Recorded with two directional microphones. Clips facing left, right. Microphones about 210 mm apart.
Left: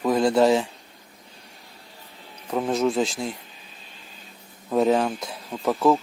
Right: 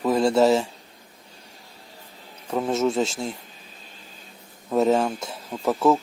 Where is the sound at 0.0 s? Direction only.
Centre (ahead or behind).